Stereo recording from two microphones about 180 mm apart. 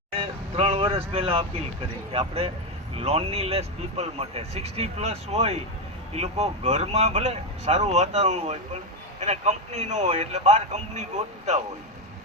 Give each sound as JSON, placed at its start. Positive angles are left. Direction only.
{"t": 0.2, "sound": "vehicle", "side_deg": -30}
{"t": 2.1, "sound": "speech", "side_deg": -35}